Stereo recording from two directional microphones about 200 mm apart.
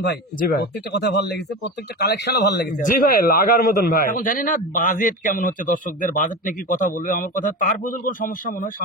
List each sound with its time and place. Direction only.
0.0 s a man's voice: 55° left (ahead or behind)